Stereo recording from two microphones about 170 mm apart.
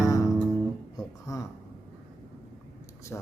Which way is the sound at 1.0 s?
20° left (ahead or behind).